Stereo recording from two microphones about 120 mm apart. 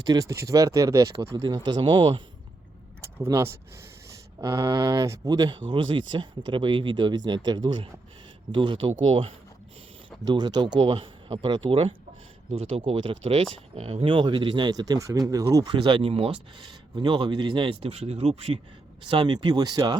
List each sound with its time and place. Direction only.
0.0 s speech: 30° right (ahead or behind)
1.3 s speech: 40° right (ahead or behind)
3.2 s speech: 25° right (ahead or behind); by 9.3 s 50° right (ahead or behind)
10.2 s speech: 35° right (ahead or behind)
15.7 s speech: 45° right (ahead or behind); by 18.6 s 60° right (ahead or behind)
19.0 s speech: 45° right (ahead or behind)